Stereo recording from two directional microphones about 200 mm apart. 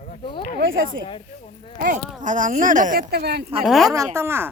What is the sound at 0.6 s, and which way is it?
Speech, 70° right (ahead or behind).